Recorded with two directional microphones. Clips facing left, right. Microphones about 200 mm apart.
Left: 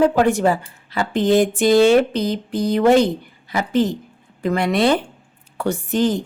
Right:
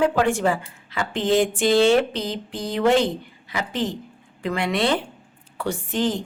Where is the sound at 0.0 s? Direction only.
40° left (ahead or behind).